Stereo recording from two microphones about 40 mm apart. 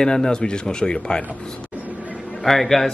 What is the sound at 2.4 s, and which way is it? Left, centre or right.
Speech, centre.